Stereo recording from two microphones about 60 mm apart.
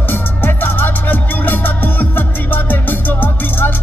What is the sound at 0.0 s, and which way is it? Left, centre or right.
Music, left.